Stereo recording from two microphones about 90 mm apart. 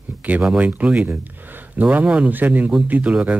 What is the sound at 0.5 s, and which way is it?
Speech, 15° right (ahead or behind).